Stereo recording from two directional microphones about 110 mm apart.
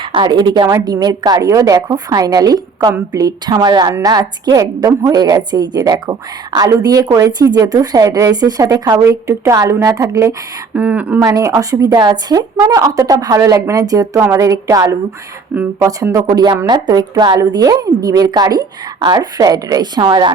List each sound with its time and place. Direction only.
0.0 s a woman's voice: 45° right (ahead or behind); by 10.3 s 25° right (ahead or behind)
10.8 s speech: 15° right (ahead or behind)
11.2 s a woman's voice: 30° right (ahead or behind)
12.5 s a woman's voice: 25° right (ahead or behind); by 20.3 s 45° right (ahead or behind)